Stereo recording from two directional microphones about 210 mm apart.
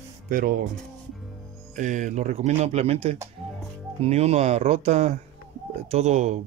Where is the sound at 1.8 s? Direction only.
35° right (ahead or behind).